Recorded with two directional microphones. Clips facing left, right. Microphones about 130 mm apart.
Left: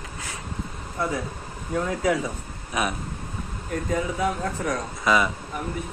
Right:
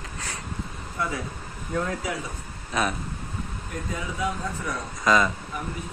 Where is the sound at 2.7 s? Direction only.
10° left (ahead or behind).